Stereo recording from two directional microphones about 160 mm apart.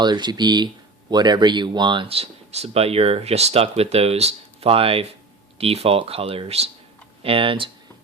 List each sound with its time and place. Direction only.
0.0 s speech: 25° right (ahead or behind)